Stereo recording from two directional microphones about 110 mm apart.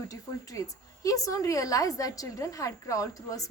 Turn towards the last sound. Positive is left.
turn(degrees=30)  # may be behind; listen again after turning